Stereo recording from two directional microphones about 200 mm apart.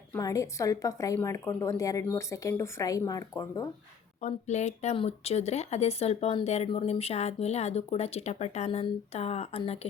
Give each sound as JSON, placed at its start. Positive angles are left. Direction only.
{"t": 0.1, "sound": "a woman's voice", "side_deg": 15}
{"t": 4.2, "sound": "speech", "side_deg": 35}